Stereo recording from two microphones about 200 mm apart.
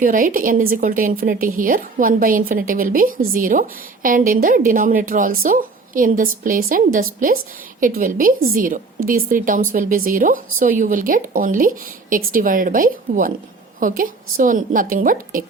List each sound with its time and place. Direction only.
0.0 s speech: 40° right (ahead or behind)